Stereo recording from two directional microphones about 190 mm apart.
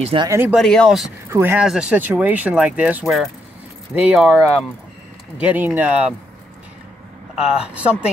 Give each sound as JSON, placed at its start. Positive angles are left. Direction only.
{"t": 0.0, "sound": "speech", "side_deg": -30}
{"t": 0.3, "sound": "speech", "side_deg": -10}
{"t": 0.6, "sound": "speech", "side_deg": 0}
{"t": 1.3, "sound": "speech", "side_deg": -10}
{"t": 7.3, "sound": "speech", "side_deg": -5}